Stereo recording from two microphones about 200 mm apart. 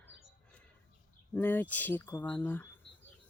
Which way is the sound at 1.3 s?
10° left (ahead or behind).